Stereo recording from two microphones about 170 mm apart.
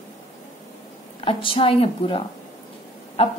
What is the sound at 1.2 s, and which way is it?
Speech, 30° left (ahead or behind).